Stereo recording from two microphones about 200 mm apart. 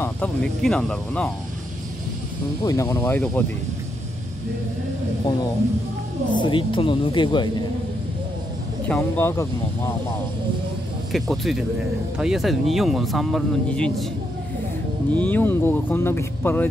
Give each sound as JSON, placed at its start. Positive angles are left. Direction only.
{"t": 0.0, "sound": "speech", "side_deg": 5}
{"t": 2.6, "sound": "speech", "side_deg": 15}
{"t": 6.3, "sound": "speech", "side_deg": 25}
{"t": 8.8, "sound": "speech", "side_deg": 10}
{"t": 11.1, "sound": "speech", "side_deg": 0}
{"t": 15.1, "sound": "speech", "side_deg": 10}